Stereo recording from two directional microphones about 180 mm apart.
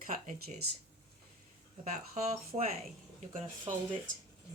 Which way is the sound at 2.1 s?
40° right (ahead or behind).